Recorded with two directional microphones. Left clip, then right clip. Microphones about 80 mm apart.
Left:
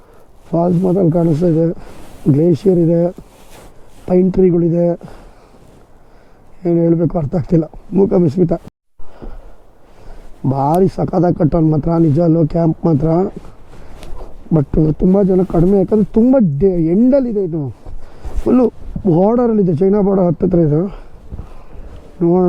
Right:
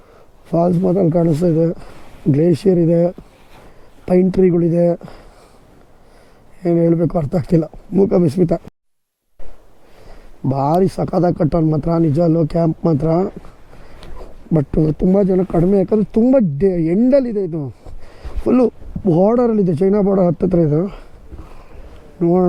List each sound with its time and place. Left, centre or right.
0.5 s speech: right
6.6 s speech: right
10.5 s speech: right
22.2 s speech: right